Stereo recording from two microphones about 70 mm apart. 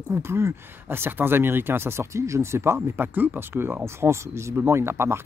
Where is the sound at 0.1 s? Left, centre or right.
Right.